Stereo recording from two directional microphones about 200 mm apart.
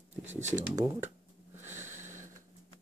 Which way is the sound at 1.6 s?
10° right (ahead or behind).